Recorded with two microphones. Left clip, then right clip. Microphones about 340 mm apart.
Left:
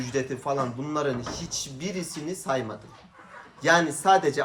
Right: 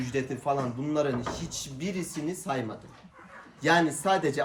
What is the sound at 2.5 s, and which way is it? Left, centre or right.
Speech, centre.